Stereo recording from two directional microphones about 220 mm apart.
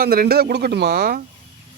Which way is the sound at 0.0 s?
45° right (ahead or behind).